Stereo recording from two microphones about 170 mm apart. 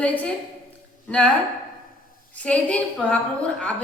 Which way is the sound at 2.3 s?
5° left (ahead or behind).